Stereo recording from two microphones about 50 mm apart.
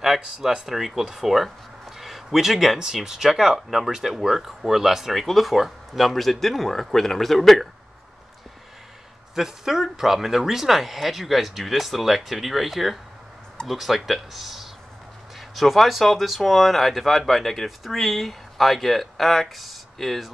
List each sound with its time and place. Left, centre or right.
0.0 s speech: centre
9.3 s speech: centre